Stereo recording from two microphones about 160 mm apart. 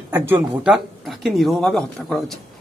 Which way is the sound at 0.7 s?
Centre (ahead or behind).